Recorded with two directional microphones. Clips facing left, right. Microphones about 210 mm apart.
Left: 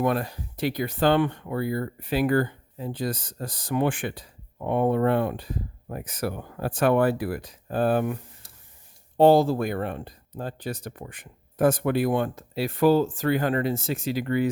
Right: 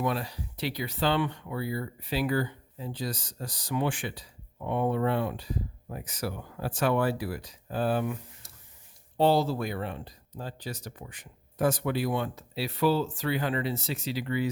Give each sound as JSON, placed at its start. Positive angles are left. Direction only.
{"t": 0.0, "sound": "speech", "side_deg": 50}